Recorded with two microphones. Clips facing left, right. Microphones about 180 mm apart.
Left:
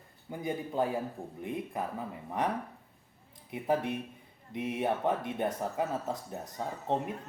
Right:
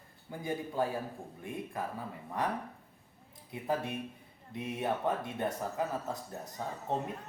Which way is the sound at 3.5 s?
20° left (ahead or behind).